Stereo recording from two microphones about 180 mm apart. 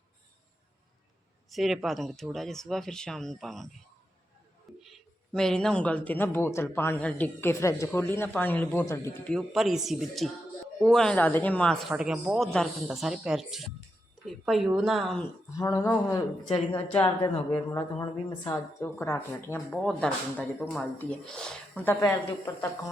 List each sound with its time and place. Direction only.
1.5 s a man's voice: centre (ahead or behind)
4.8 s a man's voice: centre (ahead or behind)
15.5 s speech: 20° left (ahead or behind)